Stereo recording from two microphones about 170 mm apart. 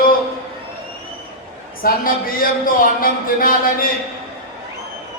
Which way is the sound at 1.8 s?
55° left (ahead or behind).